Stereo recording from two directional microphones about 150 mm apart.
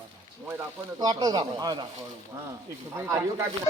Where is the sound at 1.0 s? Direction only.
25° right (ahead or behind).